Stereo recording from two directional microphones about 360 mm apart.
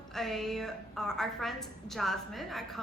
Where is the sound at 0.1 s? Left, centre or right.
Centre.